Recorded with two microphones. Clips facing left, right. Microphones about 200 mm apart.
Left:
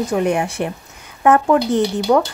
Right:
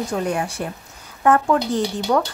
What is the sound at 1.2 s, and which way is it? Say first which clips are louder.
Speech: left 3 dB; 20° left (ahead or behind).